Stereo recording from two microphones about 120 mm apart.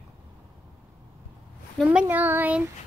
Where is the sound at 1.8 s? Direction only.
10° right (ahead or behind).